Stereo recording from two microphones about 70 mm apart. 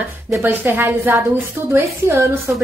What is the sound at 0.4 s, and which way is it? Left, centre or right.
A woman's voice, right.